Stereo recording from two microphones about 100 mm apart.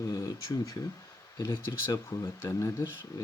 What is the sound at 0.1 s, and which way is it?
Speech, 35° left (ahead or behind).